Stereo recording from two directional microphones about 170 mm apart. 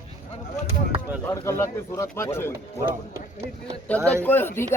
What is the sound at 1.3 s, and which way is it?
Speech, 15° left (ahead or behind).